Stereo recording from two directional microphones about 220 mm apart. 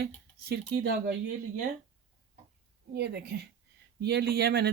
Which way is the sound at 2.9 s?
45° right (ahead or behind).